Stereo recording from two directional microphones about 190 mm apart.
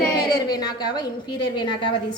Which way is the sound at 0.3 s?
20° left (ahead or behind).